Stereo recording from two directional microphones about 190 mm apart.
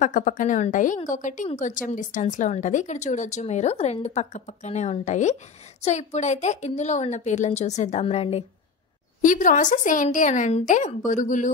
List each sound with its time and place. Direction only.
0.0 s speech: 45° left (ahead or behind)